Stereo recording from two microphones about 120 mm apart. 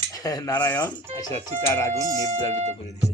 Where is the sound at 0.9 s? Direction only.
35° left (ahead or behind).